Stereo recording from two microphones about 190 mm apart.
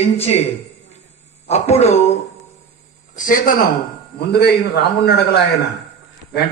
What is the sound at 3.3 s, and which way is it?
Speech, 45° left (ahead or behind).